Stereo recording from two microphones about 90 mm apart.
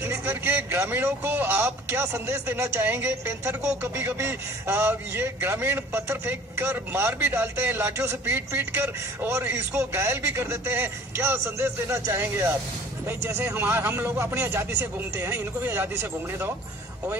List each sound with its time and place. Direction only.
0.0 s a man's voice: 25° right (ahead or behind)
13.6 s a man's voice: 25° right (ahead or behind)